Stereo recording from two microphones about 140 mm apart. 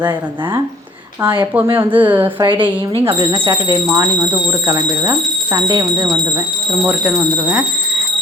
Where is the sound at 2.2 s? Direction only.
35° right (ahead or behind).